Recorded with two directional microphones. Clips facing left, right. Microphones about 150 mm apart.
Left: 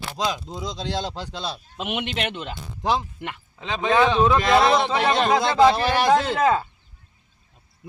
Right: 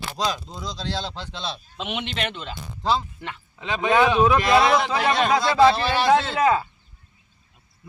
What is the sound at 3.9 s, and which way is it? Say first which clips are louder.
Speech: even; 10° right (ahead or behind).